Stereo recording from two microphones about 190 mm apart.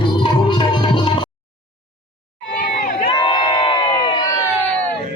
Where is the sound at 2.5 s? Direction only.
55° left (ahead or behind).